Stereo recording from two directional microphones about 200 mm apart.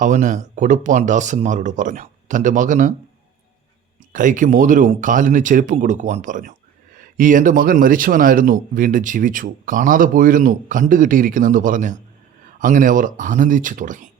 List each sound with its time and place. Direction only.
0.0 s speech: 40° right (ahead or behind)
4.1 s a man's voice: 40° right (ahead or behind)